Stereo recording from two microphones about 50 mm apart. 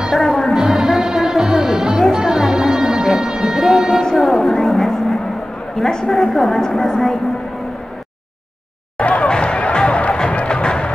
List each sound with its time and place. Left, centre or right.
0.0 s music: centre
6.0 s a woman's voice: centre
9.0 s a sound: left
10.0 s music: left